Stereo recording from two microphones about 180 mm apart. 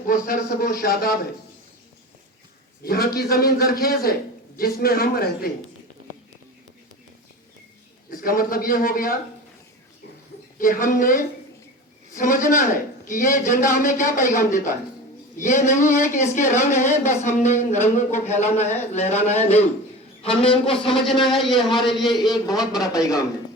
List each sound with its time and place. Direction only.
0.1 s a man's voice: 50° left (ahead or behind)
2.8 s a man's voice: 55° left (ahead or behind)
8.1 s a man's voice: 55° left (ahead or behind)
10.6 s a man's voice: 50° left (ahead or behind); by 20.7 s 30° left (ahead or behind)
20.9 s speech: centre (ahead or behind)
22.3 s a man's voice: 20° left (ahead or behind)